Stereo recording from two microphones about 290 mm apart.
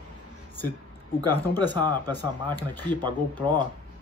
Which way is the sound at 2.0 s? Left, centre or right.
Centre.